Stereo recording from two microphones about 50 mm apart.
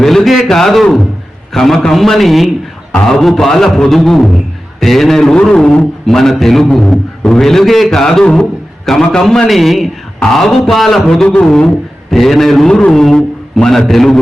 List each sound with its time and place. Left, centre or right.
0.0 s a man's voice: centre